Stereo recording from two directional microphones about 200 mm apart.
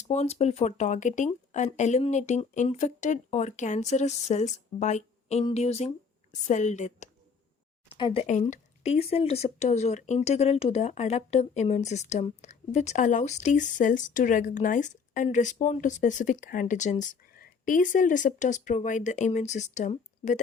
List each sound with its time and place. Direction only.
0.1 s speech: 35° left (ahead or behind)
7.9 s speech: 25° left (ahead or behind)